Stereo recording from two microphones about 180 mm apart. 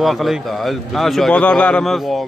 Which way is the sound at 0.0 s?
Centre (ahead or behind).